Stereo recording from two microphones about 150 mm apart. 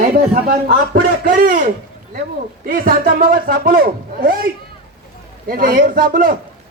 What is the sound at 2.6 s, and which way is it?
Speech, 75° right (ahead or behind).